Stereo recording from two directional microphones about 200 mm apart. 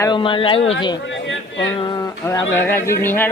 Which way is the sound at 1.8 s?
20° left (ahead or behind).